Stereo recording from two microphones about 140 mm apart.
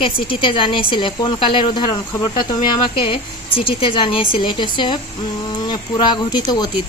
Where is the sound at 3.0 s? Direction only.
40° left (ahead or behind).